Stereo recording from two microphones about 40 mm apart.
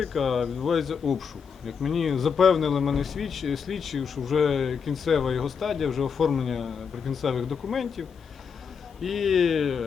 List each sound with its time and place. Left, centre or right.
0.0 s speech: centre